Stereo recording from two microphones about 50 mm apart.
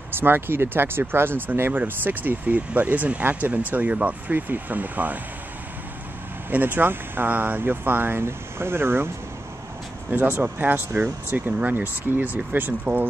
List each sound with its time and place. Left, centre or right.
0.1 s speech: right
6.5 s speech: right
10.1 s speech: right